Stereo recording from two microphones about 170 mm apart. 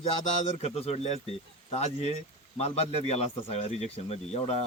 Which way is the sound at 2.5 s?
40° left (ahead or behind).